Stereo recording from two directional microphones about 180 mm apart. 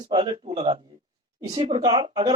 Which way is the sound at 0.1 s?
30° right (ahead or behind).